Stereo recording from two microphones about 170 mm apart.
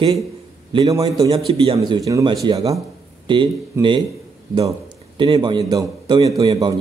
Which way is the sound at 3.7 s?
15° right (ahead or behind).